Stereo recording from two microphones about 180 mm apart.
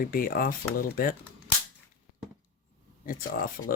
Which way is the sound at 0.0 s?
55° left (ahead or behind).